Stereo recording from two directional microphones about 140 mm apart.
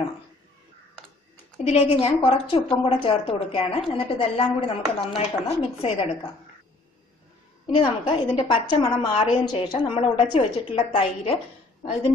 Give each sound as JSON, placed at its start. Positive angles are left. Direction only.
{"t": 1.6, "sound": "a woman's voice", "side_deg": 45}
{"t": 7.8, "sound": "a woman's voice", "side_deg": 35}